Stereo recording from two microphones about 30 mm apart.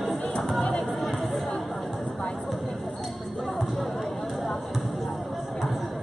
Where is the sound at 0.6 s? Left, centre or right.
Left.